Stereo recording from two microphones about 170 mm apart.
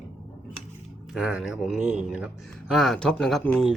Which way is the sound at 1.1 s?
5° right (ahead or behind).